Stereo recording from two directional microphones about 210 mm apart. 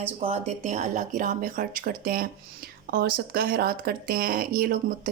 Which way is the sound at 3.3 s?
45° right (ahead or behind).